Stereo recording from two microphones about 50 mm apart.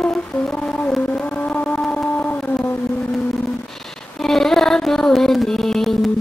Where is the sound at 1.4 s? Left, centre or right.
Left.